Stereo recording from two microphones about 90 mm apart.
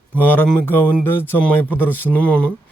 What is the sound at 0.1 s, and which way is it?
Speech, 20° left (ahead or behind).